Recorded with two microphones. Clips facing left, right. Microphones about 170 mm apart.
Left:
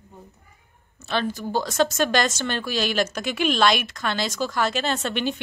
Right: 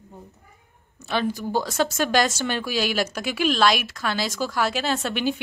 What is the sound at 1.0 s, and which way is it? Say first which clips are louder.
Speech: right 1 dB; 10° right (ahead or behind).